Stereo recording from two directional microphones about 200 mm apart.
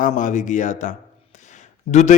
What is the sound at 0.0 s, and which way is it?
A man's voice, 40° left (ahead or behind).